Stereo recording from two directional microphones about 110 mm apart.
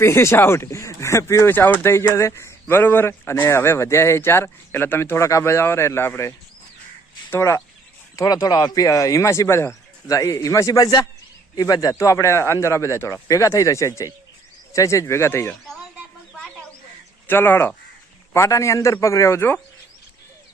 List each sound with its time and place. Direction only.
0.0 s speech: 25° left (ahead or behind)
17.2 s speech: 20° left (ahead or behind)